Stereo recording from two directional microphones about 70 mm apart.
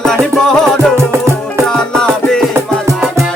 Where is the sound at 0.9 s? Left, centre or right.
Right.